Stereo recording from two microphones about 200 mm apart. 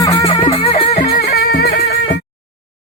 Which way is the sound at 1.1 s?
45° left (ahead or behind).